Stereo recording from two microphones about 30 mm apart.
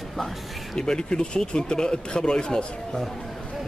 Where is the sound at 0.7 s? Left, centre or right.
Left.